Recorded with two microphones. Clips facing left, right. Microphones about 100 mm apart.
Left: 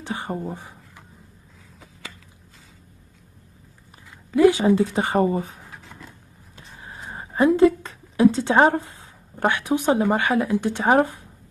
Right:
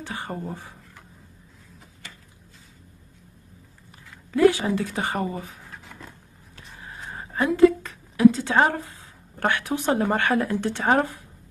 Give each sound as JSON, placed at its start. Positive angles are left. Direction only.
{"t": 0.0, "sound": "speech", "side_deg": 20}
{"t": 4.4, "sound": "speech", "side_deg": 20}
{"t": 6.5, "sound": "a sound", "side_deg": 25}
{"t": 7.2, "sound": "a woman's voice", "side_deg": 25}